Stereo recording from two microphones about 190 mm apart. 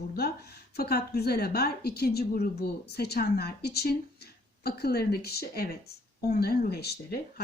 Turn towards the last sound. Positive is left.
turn(degrees=55)  # may be behind; listen again after turning